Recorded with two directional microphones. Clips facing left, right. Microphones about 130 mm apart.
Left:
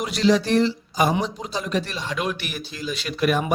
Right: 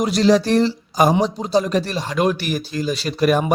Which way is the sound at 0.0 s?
40° right (ahead or behind).